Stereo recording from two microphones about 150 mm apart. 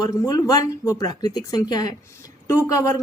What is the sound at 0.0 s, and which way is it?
Speech, 25° left (ahead or behind).